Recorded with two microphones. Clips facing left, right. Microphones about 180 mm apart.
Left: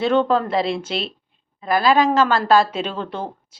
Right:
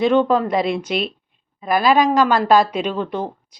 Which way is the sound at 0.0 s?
15° right (ahead or behind).